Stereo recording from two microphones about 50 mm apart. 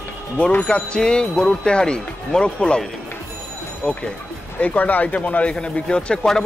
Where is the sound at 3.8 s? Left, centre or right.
Left.